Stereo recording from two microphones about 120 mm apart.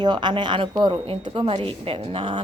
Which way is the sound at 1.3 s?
50° right (ahead or behind).